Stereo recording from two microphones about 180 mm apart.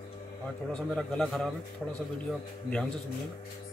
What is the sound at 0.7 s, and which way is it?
A man's voice, 5° left (ahead or behind).